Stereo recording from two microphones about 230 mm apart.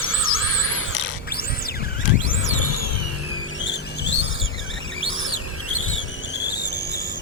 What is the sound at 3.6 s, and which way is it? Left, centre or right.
Music, left.